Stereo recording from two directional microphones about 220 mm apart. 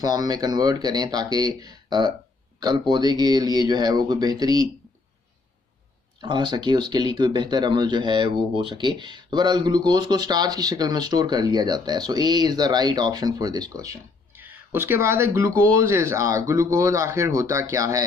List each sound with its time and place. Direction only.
0.0 s speech: 15° right (ahead or behind)
6.2 s speech: 20° right (ahead or behind)